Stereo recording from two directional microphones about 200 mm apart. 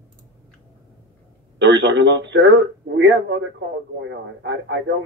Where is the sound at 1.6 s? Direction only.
60° right (ahead or behind).